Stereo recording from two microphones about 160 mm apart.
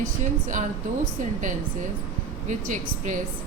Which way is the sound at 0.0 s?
55° right (ahead or behind).